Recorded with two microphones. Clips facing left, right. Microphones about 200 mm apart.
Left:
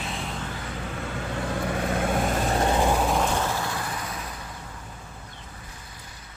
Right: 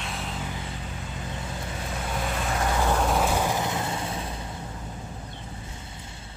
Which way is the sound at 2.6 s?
30° left (ahead or behind).